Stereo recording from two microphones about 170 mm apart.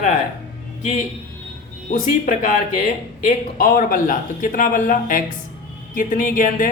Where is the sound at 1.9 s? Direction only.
50° left (ahead or behind).